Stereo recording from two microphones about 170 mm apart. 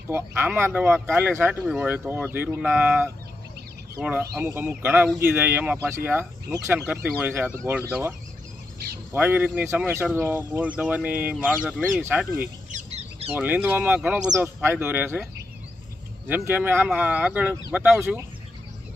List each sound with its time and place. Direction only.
0.1 s speech: 10° right (ahead or behind)
9.1 s speech: 10° right (ahead or behind)
12.7 s squawk: 35° right (ahead or behind)
13.3 s speech: 10° right (ahead or behind)
16.3 s speech: 10° right (ahead or behind)
18.0 s speech: 15° right (ahead or behind)